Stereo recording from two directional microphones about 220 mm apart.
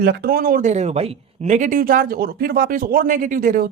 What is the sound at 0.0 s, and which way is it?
Speech, 45° right (ahead or behind).